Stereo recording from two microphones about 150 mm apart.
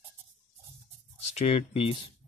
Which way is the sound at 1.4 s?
45° left (ahead or behind).